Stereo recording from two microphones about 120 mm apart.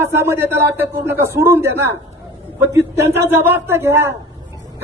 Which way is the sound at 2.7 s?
20° right (ahead or behind).